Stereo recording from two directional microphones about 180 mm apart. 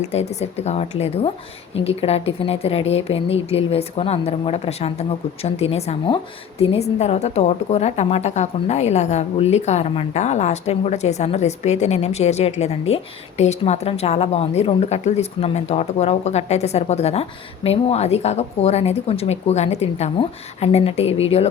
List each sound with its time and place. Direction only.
0.0 s a woman's voice: 35° left (ahead or behind)